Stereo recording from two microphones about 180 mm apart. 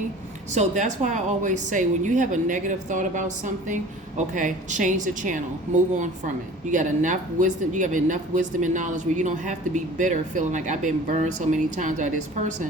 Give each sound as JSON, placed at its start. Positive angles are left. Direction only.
{"t": 0.5, "sound": "a woman's voice", "side_deg": -40}